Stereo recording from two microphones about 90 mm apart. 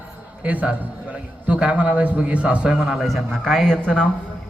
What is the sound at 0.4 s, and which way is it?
A man's voice, 15° right (ahead or behind).